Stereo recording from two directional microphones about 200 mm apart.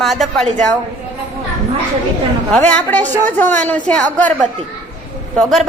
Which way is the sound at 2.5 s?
5° left (ahead or behind).